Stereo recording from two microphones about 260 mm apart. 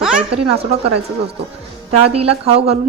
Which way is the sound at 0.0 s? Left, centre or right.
Centre.